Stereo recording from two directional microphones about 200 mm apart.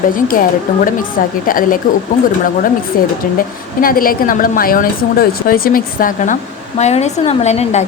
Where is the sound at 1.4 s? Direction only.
45° left (ahead or behind).